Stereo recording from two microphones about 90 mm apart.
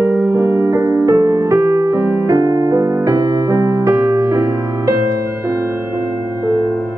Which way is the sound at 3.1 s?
45° right (ahead or behind).